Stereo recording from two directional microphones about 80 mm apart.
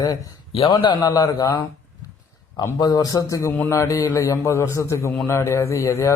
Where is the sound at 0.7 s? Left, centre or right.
Left.